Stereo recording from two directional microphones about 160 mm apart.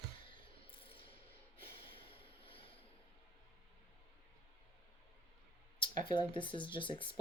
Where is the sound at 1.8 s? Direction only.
35° left (ahead or behind).